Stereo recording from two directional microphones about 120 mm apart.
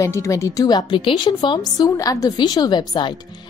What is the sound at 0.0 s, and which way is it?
A woman's voice, 25° left (ahead or behind).